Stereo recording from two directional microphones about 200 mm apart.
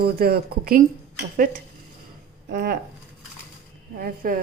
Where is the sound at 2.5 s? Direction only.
55° right (ahead or behind).